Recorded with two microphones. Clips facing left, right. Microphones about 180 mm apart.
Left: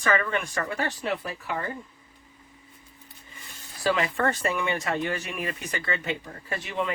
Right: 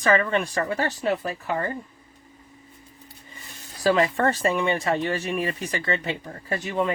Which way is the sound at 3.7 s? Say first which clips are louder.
Right 5 dB; 40° right (ahead or behind).